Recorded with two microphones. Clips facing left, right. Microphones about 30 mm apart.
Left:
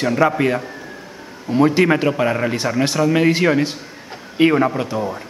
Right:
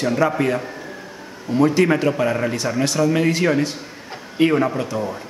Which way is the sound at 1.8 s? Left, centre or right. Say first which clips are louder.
Left 1 dB; left.